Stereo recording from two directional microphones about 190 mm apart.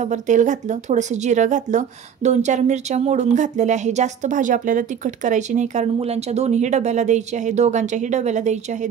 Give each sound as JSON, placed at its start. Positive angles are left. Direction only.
{"t": 0.0, "sound": "speech", "side_deg": -40}